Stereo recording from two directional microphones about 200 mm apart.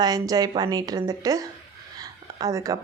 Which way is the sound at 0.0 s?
20° right (ahead or behind).